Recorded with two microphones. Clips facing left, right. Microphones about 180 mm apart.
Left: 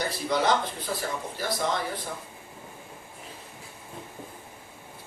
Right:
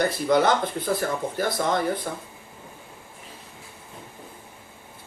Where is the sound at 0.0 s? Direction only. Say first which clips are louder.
Right 6 dB; 55° right (ahead or behind).